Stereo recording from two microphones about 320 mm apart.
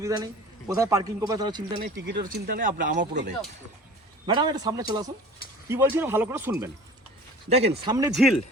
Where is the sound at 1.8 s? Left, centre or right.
Right.